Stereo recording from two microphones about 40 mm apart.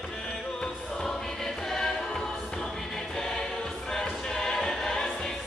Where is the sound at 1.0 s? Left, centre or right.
Centre.